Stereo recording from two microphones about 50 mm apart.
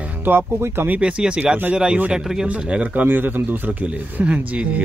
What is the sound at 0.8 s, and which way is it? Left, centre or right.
Speech, right.